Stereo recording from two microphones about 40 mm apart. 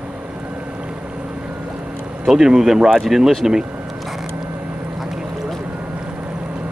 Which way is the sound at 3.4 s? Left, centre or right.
Centre.